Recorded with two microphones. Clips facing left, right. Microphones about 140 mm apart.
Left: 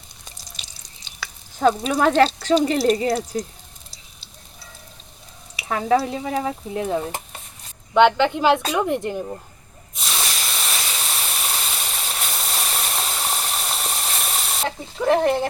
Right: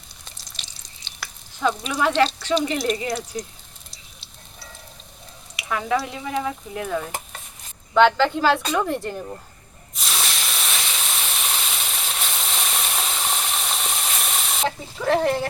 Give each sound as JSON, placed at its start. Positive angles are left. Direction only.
{"t": 1.5, "sound": "speech", "side_deg": 40}
{"t": 5.6, "sound": "speech", "side_deg": 35}
{"t": 7.9, "sound": "speech", "side_deg": 15}
{"t": 10.1, "sound": "a sound", "side_deg": 5}
{"t": 15.0, "sound": "speech", "side_deg": 15}